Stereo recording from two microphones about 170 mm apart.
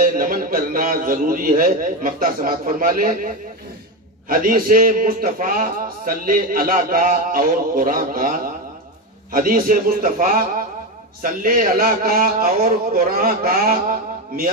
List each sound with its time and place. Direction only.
0.0 s a man's voice: 55° right (ahead or behind)